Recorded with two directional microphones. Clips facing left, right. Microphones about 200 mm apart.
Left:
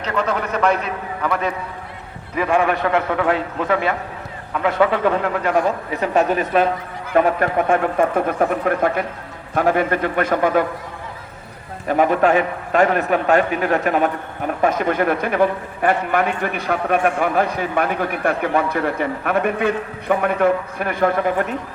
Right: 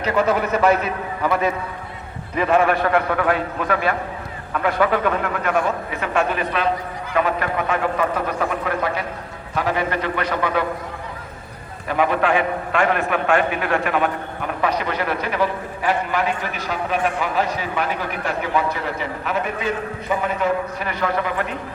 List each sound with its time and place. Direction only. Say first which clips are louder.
0.0 s a man's voice: right 3 dB; 10° right (ahead or behind)
2.3 s a man's voice: right 1 dB; 10° left (ahead or behind); by 10.7 s 45° left (ahead or behind)
11.9 s a man's voice: left 3 dB; 45° left (ahead or behind)